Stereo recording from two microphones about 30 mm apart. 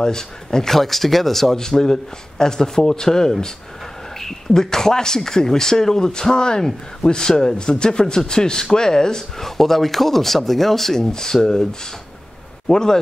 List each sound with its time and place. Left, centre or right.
0.0 s a man's voice: left
0.7 s speech: centre
1.6 s a man's voice: left
9.4 s speech: centre
11.0 s speech: centre
12.6 s a man's voice: centre